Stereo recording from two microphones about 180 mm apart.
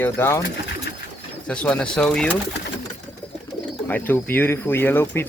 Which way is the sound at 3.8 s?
10° left (ahead or behind).